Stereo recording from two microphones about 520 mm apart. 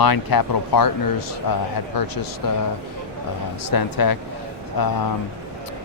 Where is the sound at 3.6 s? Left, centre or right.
Left.